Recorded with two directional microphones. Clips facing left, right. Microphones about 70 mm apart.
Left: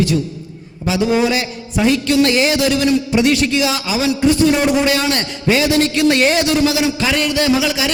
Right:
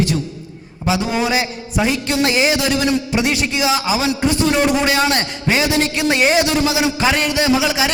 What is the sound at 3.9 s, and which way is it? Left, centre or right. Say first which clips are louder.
A man's voice: left 2 dB; right.